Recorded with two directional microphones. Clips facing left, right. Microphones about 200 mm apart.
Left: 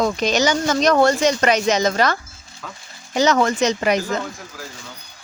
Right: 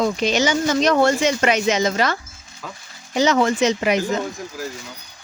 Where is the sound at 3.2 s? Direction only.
40° left (ahead or behind).